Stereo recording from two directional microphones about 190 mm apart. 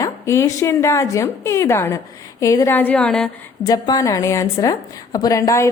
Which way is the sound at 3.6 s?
20° left (ahead or behind).